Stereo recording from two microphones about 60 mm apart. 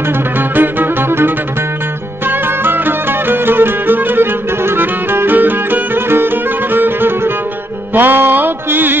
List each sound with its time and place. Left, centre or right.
0.4 s music: right